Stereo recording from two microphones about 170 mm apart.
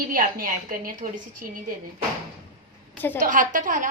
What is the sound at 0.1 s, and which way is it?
A woman's voice, 55° right (ahead or behind).